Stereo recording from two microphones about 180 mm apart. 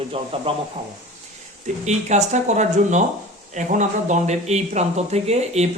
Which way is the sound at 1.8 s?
40° right (ahead or behind).